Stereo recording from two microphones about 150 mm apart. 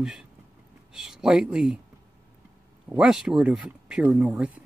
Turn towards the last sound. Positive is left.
turn(degrees=-10)  # may be behind; listen again after turning